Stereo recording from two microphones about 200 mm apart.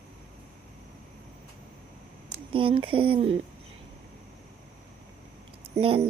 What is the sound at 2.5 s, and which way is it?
Speech, 25° right (ahead or behind).